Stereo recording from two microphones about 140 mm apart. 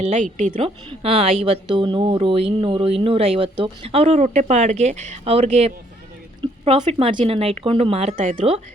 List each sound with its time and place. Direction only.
0.0 s a woman's voice: 60° right (ahead or behind)
0.5 s speech: 40° right (ahead or behind)
6.4 s a sound: 35° right (ahead or behind)
6.8 s speech: 40° right (ahead or behind)
8.1 s a woman's voice: 65° right (ahead or behind)
8.4 s speech: 45° right (ahead or behind)